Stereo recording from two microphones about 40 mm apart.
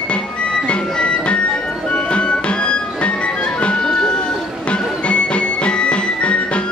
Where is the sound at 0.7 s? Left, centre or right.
Left.